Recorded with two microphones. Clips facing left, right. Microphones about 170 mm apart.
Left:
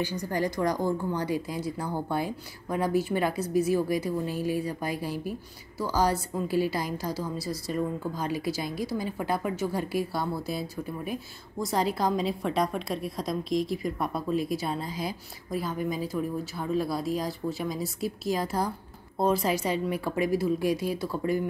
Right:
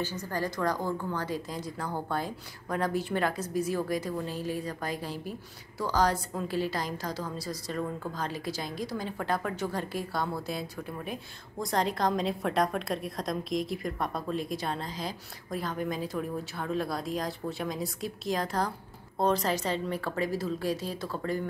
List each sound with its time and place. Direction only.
0.0 s a woman's voice: 15° left (ahead or behind)